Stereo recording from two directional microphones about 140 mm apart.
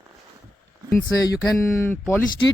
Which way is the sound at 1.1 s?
25° left (ahead or behind).